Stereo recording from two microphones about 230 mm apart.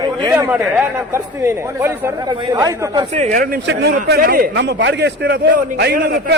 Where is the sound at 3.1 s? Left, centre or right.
Right.